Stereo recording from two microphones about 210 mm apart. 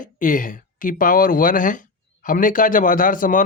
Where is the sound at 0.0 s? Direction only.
40° left (ahead or behind).